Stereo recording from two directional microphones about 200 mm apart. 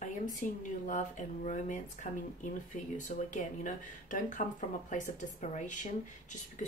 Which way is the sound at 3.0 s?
40° left (ahead or behind).